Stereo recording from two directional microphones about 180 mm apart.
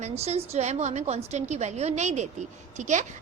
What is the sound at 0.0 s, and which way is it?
A woman's voice, 35° right (ahead or behind).